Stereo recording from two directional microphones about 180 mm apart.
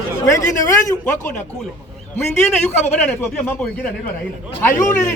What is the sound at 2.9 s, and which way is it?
Speech, 5° left (ahead or behind).